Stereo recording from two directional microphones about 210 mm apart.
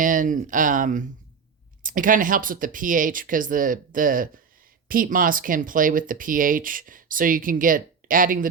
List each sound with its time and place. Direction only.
0.0 s speech: 40° right (ahead or behind)